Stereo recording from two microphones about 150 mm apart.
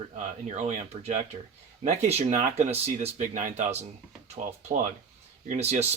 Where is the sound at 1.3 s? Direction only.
45° right (ahead or behind).